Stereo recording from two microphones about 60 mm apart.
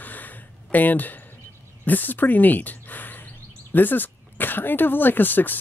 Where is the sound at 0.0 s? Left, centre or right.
Left.